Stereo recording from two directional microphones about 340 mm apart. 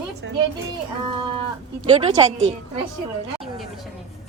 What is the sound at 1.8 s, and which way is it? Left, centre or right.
Speech, centre.